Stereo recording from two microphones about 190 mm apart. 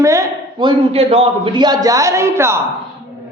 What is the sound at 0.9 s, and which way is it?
A man's voice, 30° right (ahead or behind).